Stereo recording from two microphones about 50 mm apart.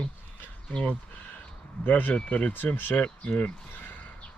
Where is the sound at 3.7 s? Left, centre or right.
Left.